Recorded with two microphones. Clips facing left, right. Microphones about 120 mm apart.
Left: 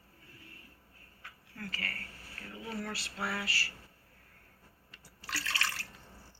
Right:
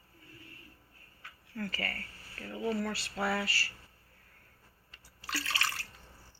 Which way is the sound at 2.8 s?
45° right (ahead or behind).